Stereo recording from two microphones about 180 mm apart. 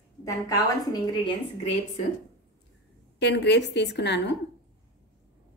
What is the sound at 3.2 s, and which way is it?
A woman's voice, 70° left (ahead or behind).